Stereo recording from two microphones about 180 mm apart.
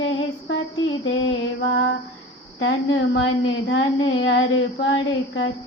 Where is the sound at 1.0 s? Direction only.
90° left.